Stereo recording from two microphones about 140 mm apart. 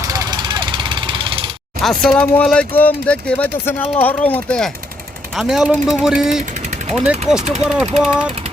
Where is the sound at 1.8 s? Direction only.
5° left (ahead or behind).